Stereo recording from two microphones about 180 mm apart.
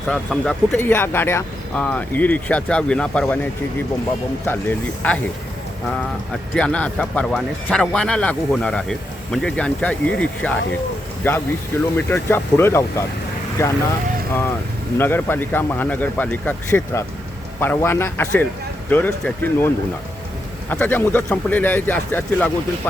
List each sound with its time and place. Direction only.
0.1 s speech: 5° left (ahead or behind)
5.0 s speech: 10° left (ahead or behind)
6.5 s speech: 5° left (ahead or behind)
14.9 s speech: 10° left (ahead or behind)